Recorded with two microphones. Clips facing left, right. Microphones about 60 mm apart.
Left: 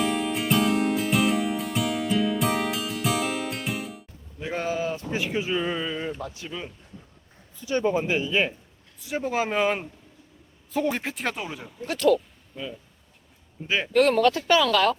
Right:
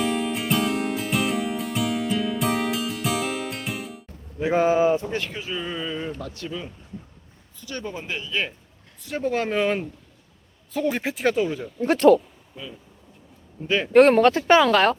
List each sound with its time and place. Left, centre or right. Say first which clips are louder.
0.0 s music: right 1 dB; centre
4.6 s a sound: right 9 dB; right
5.1 s a man's voice: left 3 dB; centre
9.0 s a man's voice: right 1 dB; centre
11.8 s speech: right 6 dB; right
13.7 s speech: right 3 dB; centre
13.9 s speech: right 5 dB; right